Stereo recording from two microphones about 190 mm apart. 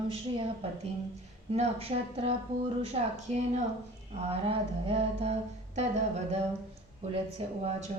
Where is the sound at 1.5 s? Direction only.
35° right (ahead or behind).